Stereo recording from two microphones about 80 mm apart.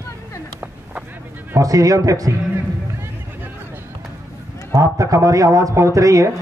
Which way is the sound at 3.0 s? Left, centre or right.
Right.